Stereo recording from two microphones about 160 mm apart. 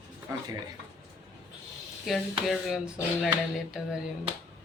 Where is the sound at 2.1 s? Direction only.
Centre (ahead or behind).